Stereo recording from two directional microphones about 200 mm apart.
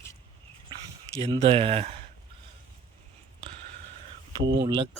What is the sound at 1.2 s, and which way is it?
Speech, 30° right (ahead or behind).